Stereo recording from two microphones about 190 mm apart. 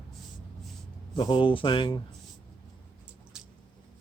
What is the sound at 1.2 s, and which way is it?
Speech, 25° left (ahead or behind).